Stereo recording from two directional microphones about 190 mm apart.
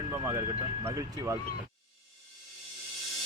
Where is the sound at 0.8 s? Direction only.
15° right (ahead or behind).